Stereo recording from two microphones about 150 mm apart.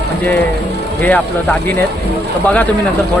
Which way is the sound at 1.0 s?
10° left (ahead or behind).